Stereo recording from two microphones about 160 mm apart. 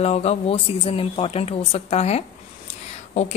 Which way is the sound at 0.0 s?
40° left (ahead or behind).